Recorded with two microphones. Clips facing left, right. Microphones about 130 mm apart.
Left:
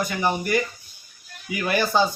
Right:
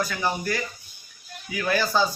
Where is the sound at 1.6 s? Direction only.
20° left (ahead or behind).